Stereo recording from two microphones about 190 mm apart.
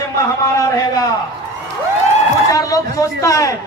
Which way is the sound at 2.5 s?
15° left (ahead or behind).